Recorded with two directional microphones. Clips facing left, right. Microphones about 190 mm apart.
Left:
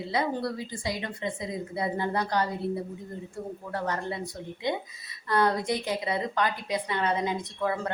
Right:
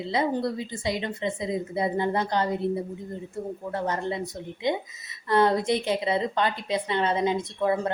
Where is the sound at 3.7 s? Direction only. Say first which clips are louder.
Right 3 dB; 20° right (ahead or behind).